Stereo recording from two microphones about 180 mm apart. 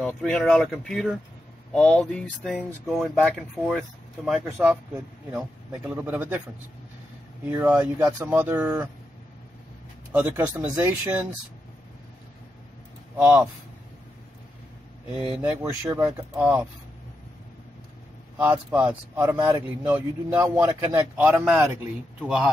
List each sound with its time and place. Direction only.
0.0 s a man's voice: 5° left (ahead or behind)
7.6 s a man's voice: 10° right (ahead or behind)
10.1 s a man's voice: 10° right (ahead or behind)
13.2 s a man's voice: 10° right (ahead or behind)
15.4 s a man's voice: 15° right (ahead or behind)
18.4 s a man's voice: 10° right (ahead or behind)
19.3 s a man's voice: 25° right (ahead or behind)
19.8 s a man's voice: 10° right (ahead or behind)